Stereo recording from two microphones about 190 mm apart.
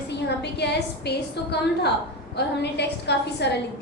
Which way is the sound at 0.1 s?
60° left (ahead or behind).